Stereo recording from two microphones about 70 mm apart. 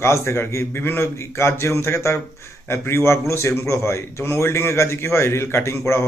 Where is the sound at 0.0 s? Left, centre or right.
Left.